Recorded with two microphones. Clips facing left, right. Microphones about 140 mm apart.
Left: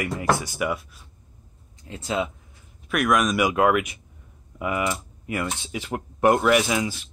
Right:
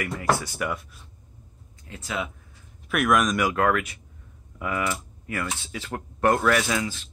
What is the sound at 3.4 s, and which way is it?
Speech, 15° left (ahead or behind).